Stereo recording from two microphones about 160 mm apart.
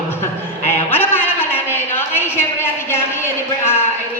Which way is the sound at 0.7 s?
15° left (ahead or behind).